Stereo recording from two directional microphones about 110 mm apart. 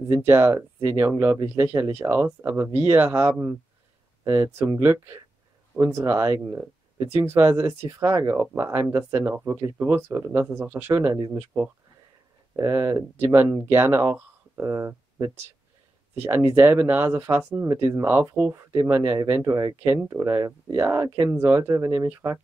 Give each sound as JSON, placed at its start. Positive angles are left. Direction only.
{"t": 0.1, "sound": "speech", "side_deg": -20}
{"t": 12.5, "sound": "speech", "side_deg": -30}